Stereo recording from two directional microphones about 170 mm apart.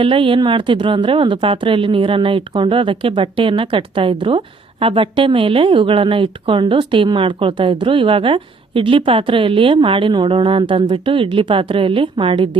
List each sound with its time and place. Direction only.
0.0 s a woman's voice: 30° right (ahead or behind)